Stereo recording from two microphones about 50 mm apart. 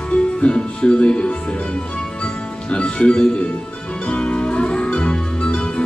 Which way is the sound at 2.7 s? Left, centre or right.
Left.